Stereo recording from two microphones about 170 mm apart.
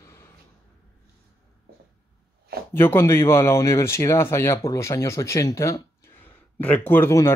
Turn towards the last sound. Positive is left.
turn(degrees=15)  # may be behind; listen again after turning